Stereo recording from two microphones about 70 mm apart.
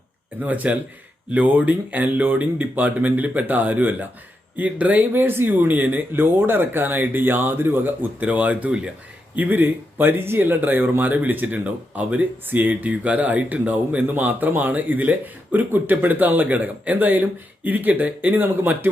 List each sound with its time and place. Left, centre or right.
0.4 s speech: right